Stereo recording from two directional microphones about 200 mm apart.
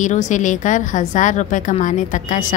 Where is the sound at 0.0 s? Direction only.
40° left (ahead or behind).